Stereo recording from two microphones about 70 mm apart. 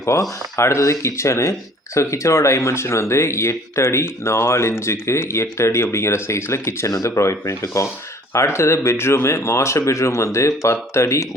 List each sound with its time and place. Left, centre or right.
0.0 s speech: left